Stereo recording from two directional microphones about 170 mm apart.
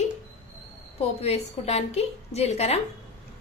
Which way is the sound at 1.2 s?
40° left (ahead or behind).